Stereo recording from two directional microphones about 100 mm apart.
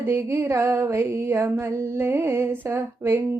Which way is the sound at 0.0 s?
25° right (ahead or behind).